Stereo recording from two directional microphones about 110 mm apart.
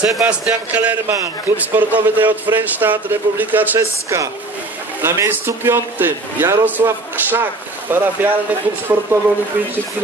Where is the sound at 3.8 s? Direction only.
30° right (ahead or behind).